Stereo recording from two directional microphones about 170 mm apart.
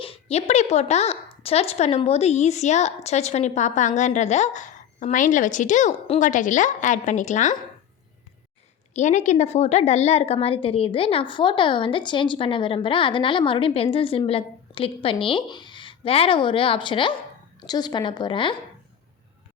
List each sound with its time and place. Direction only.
0.0 s speech: 35° left (ahead or behind)
8.9 s a woman's voice: 45° left (ahead or behind); by 18.5 s 30° left (ahead or behind)